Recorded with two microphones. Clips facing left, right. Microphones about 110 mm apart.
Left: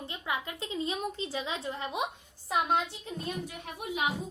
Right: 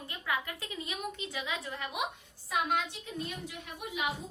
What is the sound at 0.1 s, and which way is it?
A woman's voice, 20° left (ahead or behind).